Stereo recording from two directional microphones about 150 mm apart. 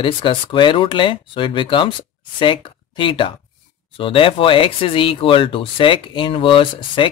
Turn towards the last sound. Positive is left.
turn(degrees=35)  # may be behind; listen again after turning